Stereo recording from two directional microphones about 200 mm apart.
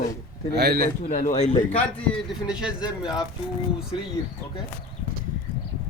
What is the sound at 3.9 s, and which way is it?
Speech, 5° right (ahead or behind).